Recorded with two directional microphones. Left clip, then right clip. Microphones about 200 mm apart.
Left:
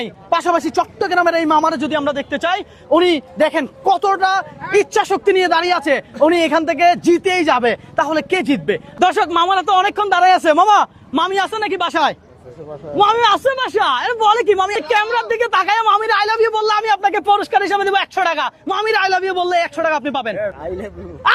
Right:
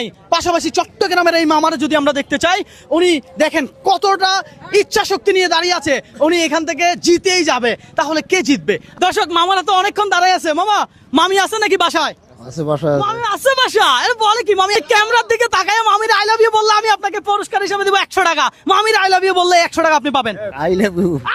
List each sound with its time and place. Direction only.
0.0 s speech: 20° right (ahead or behind)
11.1 s a woman's voice: 40° right (ahead or behind)
13.0 s speech: 5° left (ahead or behind)
13.4 s speech: 50° right (ahead or behind)
14.2 s speech: 25° right (ahead or behind)
14.6 s a woman's voice: 40° right (ahead or behind)